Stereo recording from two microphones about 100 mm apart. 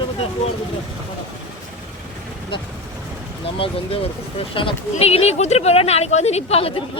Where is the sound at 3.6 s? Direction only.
70° left (ahead or behind).